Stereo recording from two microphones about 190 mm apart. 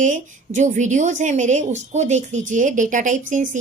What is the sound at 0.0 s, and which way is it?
A woman's voice, 40° right (ahead or behind).